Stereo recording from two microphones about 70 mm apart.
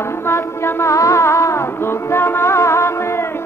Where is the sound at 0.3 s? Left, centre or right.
Left.